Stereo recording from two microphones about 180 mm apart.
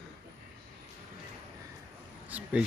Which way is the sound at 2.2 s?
5° right (ahead or behind).